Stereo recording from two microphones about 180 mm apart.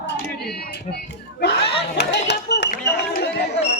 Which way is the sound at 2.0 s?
70° left (ahead or behind).